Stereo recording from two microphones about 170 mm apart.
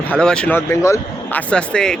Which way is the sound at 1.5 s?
5° left (ahead or behind).